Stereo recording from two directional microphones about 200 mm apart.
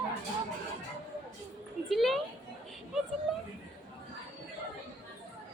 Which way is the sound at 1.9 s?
Centre (ahead or behind).